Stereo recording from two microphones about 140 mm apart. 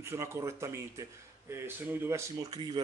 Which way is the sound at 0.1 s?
20° right (ahead or behind).